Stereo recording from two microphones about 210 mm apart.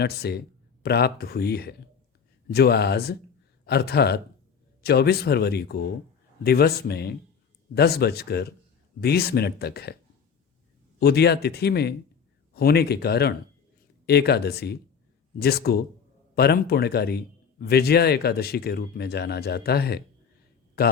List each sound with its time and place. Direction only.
0.0 s a man's voice: 50° left (ahead or behind)
11.0 s a man's voice: 50° left (ahead or behind)